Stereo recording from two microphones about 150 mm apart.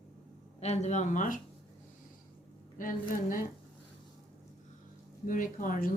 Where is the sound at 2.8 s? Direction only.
65° left (ahead or behind).